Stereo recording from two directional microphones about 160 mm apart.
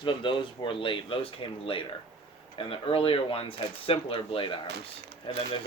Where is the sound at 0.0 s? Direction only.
30° left (ahead or behind).